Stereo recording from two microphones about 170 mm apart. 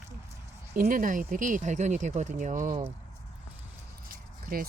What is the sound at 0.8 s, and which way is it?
Speech, 55° right (ahead or behind).